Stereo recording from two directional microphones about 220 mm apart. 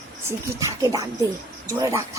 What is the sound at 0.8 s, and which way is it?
A woman's voice, 15° right (ahead or behind).